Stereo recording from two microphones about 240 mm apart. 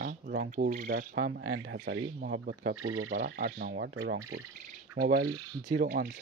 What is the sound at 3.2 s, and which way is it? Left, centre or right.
Speech, right.